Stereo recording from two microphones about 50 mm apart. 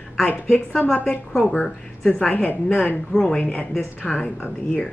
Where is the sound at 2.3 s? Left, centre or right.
Left.